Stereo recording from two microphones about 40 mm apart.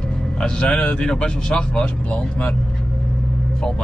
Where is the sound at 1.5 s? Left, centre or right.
Left.